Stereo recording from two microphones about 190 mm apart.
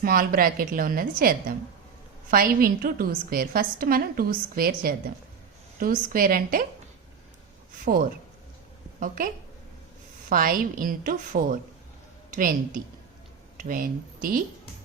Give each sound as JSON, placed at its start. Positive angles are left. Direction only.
{"t": 0.0, "sound": "a woman's voice", "side_deg": -50}
{"t": 9.0, "sound": "a woman's voice", "side_deg": -45}